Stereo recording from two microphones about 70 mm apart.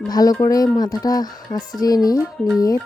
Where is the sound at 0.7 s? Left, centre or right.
Left.